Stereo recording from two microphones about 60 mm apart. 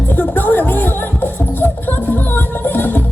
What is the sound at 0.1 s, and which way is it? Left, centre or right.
Music, left.